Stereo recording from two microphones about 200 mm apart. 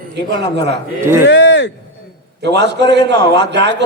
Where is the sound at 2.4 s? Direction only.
60° right (ahead or behind).